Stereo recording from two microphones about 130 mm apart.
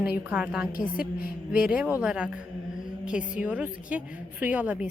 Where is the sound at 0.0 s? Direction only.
10° right (ahead or behind).